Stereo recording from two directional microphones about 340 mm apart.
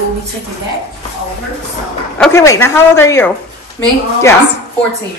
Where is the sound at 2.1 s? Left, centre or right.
Centre.